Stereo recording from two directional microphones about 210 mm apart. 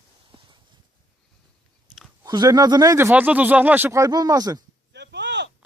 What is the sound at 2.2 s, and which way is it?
Speech, 20° right (ahead or behind).